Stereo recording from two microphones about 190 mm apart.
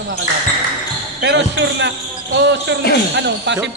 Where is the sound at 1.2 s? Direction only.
65° right (ahead or behind).